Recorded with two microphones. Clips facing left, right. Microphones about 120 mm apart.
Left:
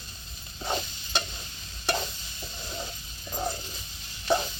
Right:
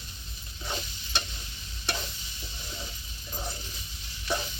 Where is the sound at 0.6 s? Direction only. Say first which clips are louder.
Left 6 dB; 40° left (ahead or behind).